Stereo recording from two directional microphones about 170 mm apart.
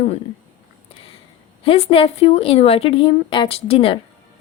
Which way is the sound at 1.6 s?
35° left (ahead or behind).